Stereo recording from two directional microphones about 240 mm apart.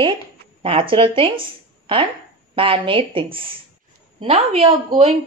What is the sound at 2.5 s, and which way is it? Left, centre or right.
Speech, right.